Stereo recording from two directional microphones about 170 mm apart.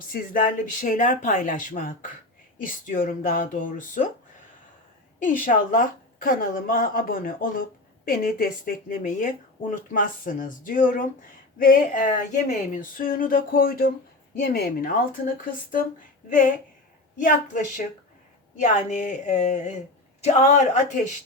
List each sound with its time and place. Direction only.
0.1 s a woman's voice: 50° left (ahead or behind)
5.2 s a woman's voice: 50° left (ahead or behind)
17.2 s a woman's voice: 50° left (ahead or behind)